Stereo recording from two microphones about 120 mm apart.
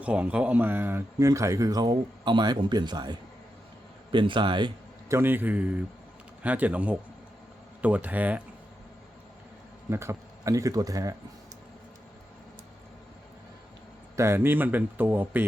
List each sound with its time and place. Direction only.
0.0 s a man's voice: 10° right (ahead or behind); by 4.7 s 40° right (ahead or behind)
5.0 s a man's voice: 20° right (ahead or behind)
9.9 s speech: 25° right (ahead or behind)
14.2 s a man's voice: 20° right (ahead or behind)